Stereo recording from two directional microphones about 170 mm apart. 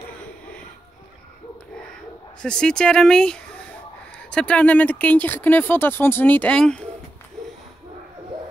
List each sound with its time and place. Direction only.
2.4 s speech: 5° left (ahead or behind)